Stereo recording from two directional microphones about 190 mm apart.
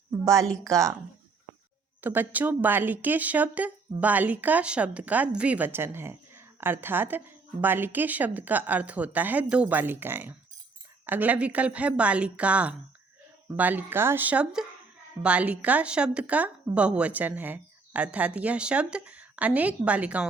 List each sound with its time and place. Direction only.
0.6 s speech: 15° right (ahead or behind)
2.0 s speech: 10° right (ahead or behind)